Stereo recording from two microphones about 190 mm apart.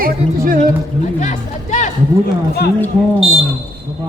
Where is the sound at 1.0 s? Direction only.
40° left (ahead or behind).